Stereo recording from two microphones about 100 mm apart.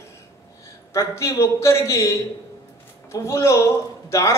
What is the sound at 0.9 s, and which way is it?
A man's voice, 30° left (ahead or behind).